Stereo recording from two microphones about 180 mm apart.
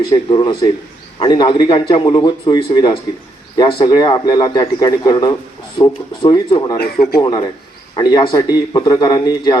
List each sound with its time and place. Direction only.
0.1 s a man's voice: 25° left (ahead or behind)
6.7 s speech: 55° left (ahead or behind)
7.2 s a man's voice: 25° left (ahead or behind)